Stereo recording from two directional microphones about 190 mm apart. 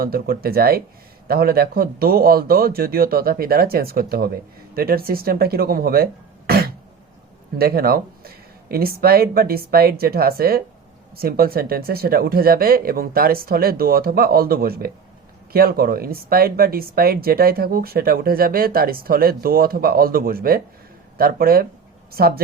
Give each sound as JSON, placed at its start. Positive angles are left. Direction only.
{"t": 0.0, "sound": "speech", "side_deg": -50}
{"t": 6.5, "sound": "cough", "side_deg": -55}
{"t": 7.6, "sound": "speech", "side_deg": -55}